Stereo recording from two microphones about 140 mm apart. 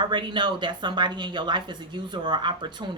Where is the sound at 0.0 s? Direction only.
30° right (ahead or behind).